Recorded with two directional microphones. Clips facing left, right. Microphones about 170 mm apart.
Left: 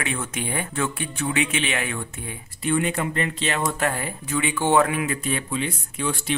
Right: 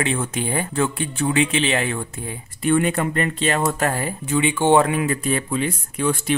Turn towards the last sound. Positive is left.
turn(degrees=-50)  # may be behind; listen again after turning